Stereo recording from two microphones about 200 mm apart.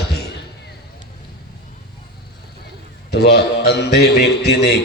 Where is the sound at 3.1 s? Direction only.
55° left (ahead or behind).